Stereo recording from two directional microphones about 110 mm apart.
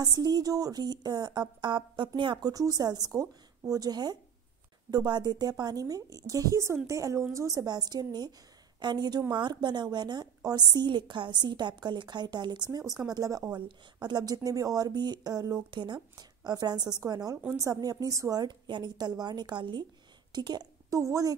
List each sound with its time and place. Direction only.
0.0 s a woman's voice: 35° right (ahead or behind)